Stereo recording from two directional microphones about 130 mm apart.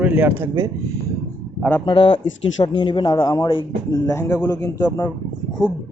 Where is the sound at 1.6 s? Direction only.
15° left (ahead or behind).